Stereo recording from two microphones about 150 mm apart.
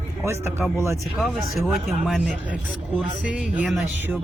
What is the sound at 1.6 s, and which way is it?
Speech, centre (ahead or behind).